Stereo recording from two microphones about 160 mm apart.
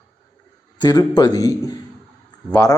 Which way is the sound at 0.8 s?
25° left (ahead or behind).